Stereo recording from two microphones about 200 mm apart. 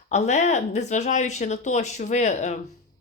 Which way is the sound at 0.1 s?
35° left (ahead or behind).